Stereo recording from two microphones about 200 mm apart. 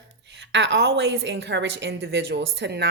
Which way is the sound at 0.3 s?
60° right (ahead or behind).